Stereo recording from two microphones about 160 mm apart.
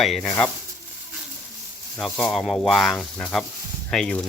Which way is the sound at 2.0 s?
5° left (ahead or behind).